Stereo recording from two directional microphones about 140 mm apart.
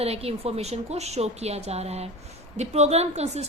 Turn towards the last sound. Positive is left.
turn(degrees=-50)  # may be behind; listen again after turning